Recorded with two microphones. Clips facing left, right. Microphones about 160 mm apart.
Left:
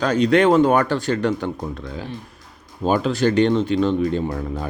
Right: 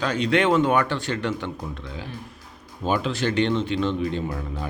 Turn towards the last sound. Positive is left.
turn(degrees=40)  # may be behind; listen again after turning